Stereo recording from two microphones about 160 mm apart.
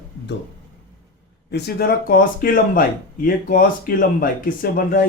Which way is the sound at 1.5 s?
90° left.